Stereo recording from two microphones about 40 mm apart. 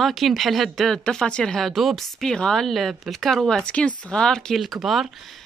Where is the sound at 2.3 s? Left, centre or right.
Centre.